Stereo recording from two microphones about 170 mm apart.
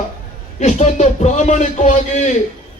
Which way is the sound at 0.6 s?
45° left (ahead or behind).